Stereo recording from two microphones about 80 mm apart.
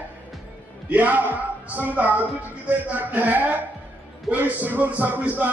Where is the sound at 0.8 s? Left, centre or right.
Centre.